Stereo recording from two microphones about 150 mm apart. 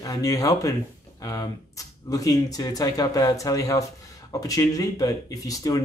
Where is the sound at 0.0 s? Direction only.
25° left (ahead or behind).